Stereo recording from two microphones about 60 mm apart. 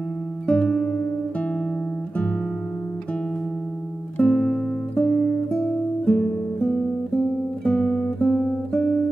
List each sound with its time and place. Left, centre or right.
0.5 s music: centre
4.2 s music: centre
4.9 s music: left
5.5 s guitar: centre